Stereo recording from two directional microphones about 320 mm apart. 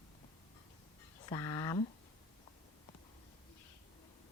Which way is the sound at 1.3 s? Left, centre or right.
Centre.